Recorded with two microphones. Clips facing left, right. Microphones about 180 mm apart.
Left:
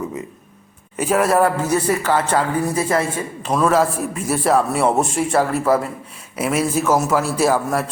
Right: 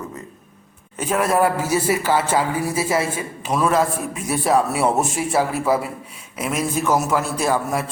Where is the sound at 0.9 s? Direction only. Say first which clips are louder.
Left 3 dB; 5° left (ahead or behind).